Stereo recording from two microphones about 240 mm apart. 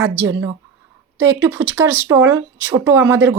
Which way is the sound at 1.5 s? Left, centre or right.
Centre.